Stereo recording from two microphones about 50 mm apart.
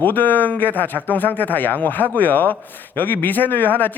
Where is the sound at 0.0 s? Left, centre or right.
Left.